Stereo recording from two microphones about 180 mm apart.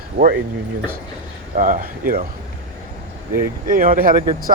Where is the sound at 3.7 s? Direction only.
50° right (ahead or behind).